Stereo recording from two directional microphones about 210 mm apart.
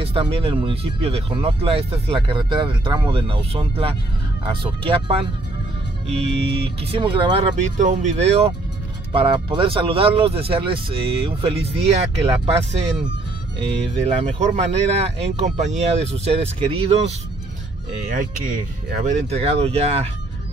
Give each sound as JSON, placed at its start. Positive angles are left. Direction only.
{"t": 0.0, "sound": "speech", "side_deg": -25}
{"t": 7.6, "sound": "speech", "side_deg": -35}
{"t": 14.0, "sound": "speech", "side_deg": -30}
{"t": 18.0, "sound": "speech", "side_deg": -40}